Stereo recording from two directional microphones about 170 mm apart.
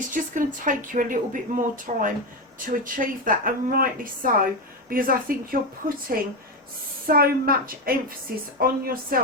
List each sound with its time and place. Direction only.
0.1 s a woman's voice: 50° right (ahead or behind)